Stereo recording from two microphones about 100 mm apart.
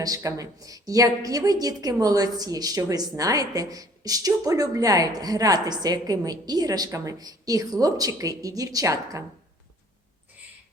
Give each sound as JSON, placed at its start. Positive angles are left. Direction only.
{"t": 0.0, "sound": "a woman's voice", "side_deg": -35}